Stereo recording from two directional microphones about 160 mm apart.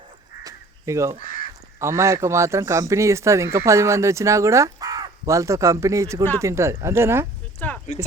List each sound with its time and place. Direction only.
0.4 s crow: 20° right (ahead or behind)
1.2 s crow: 55° left (ahead or behind)
1.8 s speech: 20° right (ahead or behind)
7.6 s a sound: 10° left (ahead or behind)